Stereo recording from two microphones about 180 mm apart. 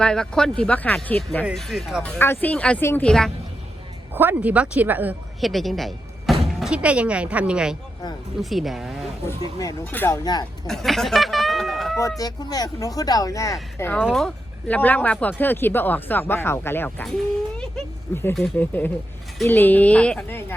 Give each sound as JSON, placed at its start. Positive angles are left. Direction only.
{"t": 0.0, "sound": "speech", "side_deg": 5}
{"t": 2.1, "sound": "speech", "side_deg": 10}
{"t": 4.1, "sound": "a woman's voice", "side_deg": -10}
{"t": 9.2, "sound": "speech", "side_deg": 20}
{"t": 10.7, "sound": "a sound", "side_deg": 0}
{"t": 11.9, "sound": "speech", "side_deg": 20}
{"t": 18.1, "sound": "speech", "side_deg": 15}